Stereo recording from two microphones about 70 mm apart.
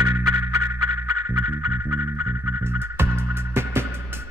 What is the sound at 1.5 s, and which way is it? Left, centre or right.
Music, right.